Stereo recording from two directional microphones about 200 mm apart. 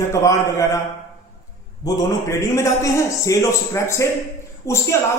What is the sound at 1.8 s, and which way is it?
A man's voice, 15° left (ahead or behind).